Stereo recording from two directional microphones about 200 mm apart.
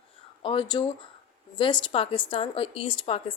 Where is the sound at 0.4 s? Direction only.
25° left (ahead or behind).